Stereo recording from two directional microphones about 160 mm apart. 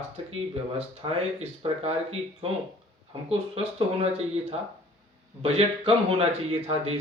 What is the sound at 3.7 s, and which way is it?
Speech, 40° right (ahead or behind).